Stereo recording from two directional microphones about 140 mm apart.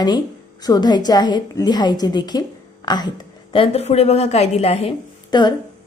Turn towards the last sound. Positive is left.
turn(degrees=30)  # may be behind; listen again after turning